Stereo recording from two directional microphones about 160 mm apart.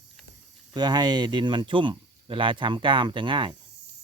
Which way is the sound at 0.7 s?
25° right (ahead or behind).